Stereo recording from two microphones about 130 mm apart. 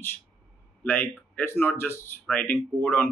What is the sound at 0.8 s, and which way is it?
Speech, 15° left (ahead or behind).